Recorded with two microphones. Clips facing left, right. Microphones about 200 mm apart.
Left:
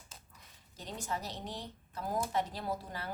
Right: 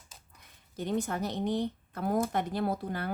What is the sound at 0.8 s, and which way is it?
A woman's voice, 55° right (ahead or behind).